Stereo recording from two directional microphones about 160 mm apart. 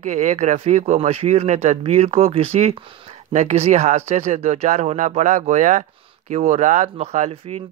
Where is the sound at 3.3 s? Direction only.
45° right (ahead or behind).